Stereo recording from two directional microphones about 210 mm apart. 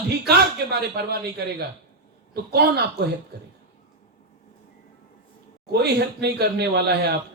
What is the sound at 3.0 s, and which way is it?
Speech, 50° right (ahead or behind).